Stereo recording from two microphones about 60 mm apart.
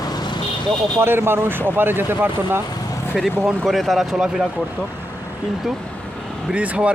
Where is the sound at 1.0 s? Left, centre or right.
Right.